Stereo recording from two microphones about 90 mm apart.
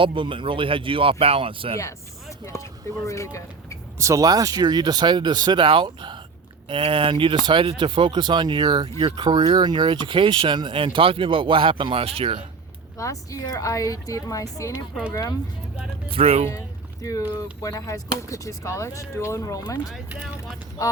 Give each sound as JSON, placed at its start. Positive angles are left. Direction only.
{"t": 0.0, "sound": "speech", "side_deg": -70}
{"t": 2.4, "sound": "speech", "side_deg": 35}
{"t": 3.9, "sound": "speech", "side_deg": -35}
{"t": 5.6, "sound": "speech", "side_deg": -70}
{"t": 6.7, "sound": "speech", "side_deg": -75}
{"t": 13.0, "sound": "speech", "side_deg": 40}
{"t": 16.1, "sound": "speech", "side_deg": -90}
{"t": 16.5, "sound": "boat", "side_deg": 35}
{"t": 17.3, "sound": "speech", "side_deg": 40}